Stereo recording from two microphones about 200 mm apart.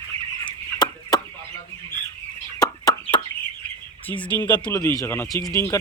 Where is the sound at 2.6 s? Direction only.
20° left (ahead or behind).